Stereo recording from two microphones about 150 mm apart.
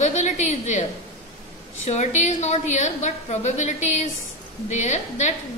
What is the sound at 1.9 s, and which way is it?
A woman's voice, 50° left (ahead or behind).